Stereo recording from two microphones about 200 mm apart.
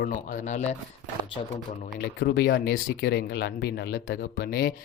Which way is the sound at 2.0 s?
55° left (ahead or behind).